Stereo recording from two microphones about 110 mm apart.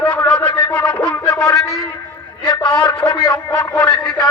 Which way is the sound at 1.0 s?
30° left (ahead or behind).